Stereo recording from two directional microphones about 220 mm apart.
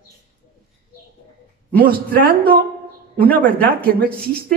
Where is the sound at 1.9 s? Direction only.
40° right (ahead or behind).